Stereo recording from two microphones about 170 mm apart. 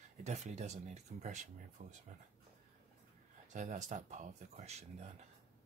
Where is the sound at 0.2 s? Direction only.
40° right (ahead or behind).